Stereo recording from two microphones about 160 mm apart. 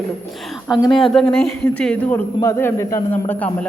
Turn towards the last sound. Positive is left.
turn(degrees=10)  # may be behind; listen again after turning